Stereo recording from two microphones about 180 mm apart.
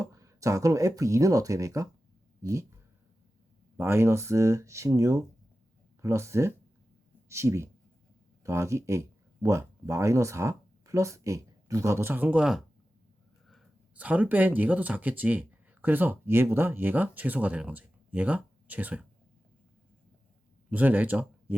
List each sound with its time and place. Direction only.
0.0 s speech: 15° right (ahead or behind)
3.8 s speech: 15° right (ahead or behind)
20.7 s speech: 10° right (ahead or behind)